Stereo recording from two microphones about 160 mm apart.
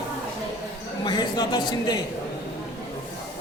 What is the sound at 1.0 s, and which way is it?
Speech, 25° left (ahead or behind).